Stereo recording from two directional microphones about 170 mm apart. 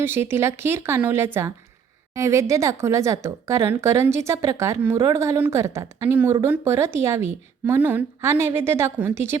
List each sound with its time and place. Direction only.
0.0 s a woman's voice: 15° right (ahead or behind)